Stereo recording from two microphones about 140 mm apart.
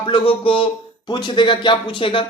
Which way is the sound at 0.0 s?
40° left (ahead or behind).